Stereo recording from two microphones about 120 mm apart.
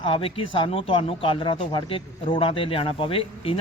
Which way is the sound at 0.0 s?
50° left (ahead or behind).